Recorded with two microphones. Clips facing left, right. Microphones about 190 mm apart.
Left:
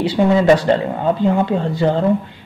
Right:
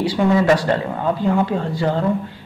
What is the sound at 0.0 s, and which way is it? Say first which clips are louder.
Speech: left 2 dB; 20° left (ahead or behind).